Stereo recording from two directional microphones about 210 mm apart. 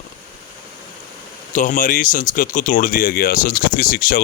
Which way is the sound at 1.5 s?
40° left (ahead or behind).